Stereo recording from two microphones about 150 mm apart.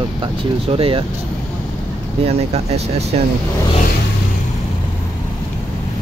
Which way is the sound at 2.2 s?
45° right (ahead or behind).